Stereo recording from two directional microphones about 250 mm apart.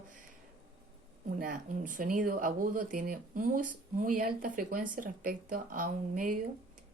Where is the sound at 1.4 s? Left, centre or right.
Right.